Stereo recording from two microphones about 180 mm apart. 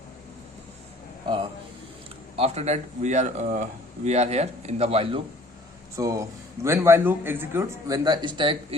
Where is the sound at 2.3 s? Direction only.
35° right (ahead or behind).